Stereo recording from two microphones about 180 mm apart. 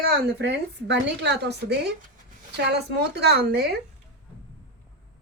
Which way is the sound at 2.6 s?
65° right (ahead or behind).